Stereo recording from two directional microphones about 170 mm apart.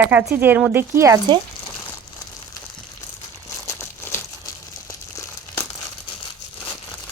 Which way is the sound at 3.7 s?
15° left (ahead or behind).